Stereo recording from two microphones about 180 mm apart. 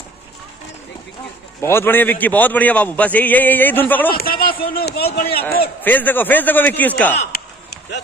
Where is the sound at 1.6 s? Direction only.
10° left (ahead or behind).